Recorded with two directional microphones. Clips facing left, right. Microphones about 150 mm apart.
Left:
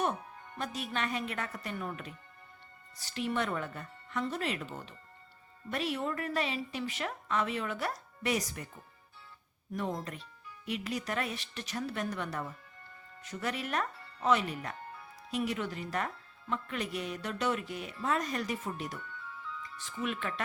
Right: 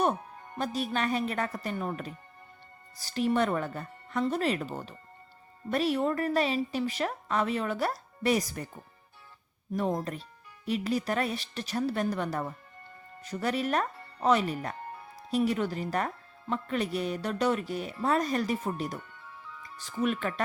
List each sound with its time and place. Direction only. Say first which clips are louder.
0.0 s speech: right 5 dB; 35° right (ahead or behind)
9.7 s speech: right 6 dB; 35° right (ahead or behind)